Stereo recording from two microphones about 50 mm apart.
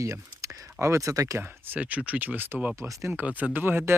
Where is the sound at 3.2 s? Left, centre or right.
Right.